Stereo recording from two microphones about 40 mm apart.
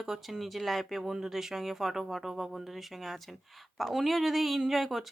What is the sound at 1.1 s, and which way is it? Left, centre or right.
Speech, centre.